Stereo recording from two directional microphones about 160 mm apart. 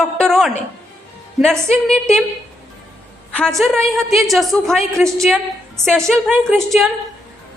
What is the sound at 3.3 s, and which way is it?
A woman's voice, 5° left (ahead or behind).